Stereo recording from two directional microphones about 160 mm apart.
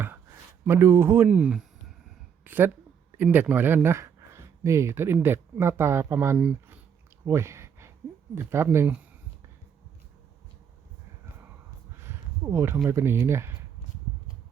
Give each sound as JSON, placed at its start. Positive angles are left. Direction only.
{"t": 0.6, "sound": "speech", "side_deg": -15}
{"t": 7.3, "sound": "a sound", "side_deg": -15}
{"t": 8.4, "sound": "speech", "side_deg": -15}
{"t": 11.9, "sound": "speech", "side_deg": -15}